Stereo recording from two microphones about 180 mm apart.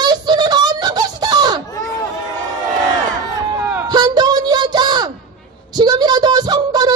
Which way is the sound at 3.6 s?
15° right (ahead or behind).